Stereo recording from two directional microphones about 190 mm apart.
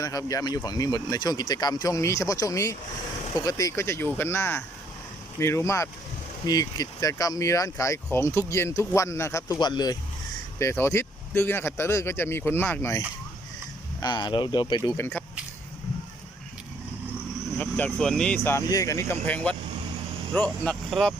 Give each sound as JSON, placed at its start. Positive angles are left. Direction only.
{"t": 0.0, "sound": "speech", "side_deg": 20}
{"t": 14.0, "sound": "speech", "side_deg": 25}
{"t": 14.8, "sound": "speech", "side_deg": 15}
{"t": 17.6, "sound": "speech", "side_deg": 10}
{"t": 18.4, "sound": "speech", "side_deg": 15}